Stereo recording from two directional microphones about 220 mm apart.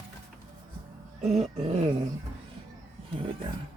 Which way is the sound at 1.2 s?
30° right (ahead or behind).